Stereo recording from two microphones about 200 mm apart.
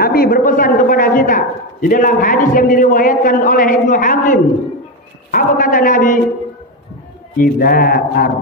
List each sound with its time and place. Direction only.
0.0 s a man's voice: 50° left (ahead or behind)
7.3 s a man's voice: 50° left (ahead or behind)